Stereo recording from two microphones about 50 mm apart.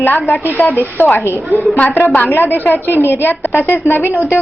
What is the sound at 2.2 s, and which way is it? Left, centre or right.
A woman's voice, left.